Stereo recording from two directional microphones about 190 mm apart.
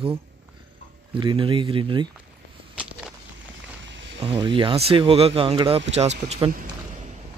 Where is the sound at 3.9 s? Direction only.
70° right (ahead or behind).